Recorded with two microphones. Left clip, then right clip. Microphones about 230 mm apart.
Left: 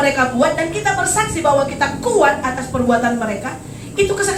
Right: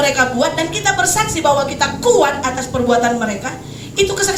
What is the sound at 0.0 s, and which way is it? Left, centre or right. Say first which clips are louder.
A woman's voice: even; right.